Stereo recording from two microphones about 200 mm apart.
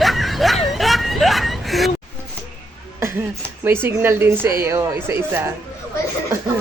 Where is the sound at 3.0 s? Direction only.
10° right (ahead or behind).